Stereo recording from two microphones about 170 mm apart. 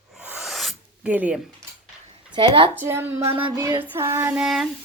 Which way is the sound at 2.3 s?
30° right (ahead or behind).